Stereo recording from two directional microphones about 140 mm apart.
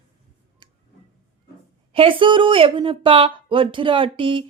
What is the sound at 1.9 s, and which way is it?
Speech, 40° right (ahead or behind).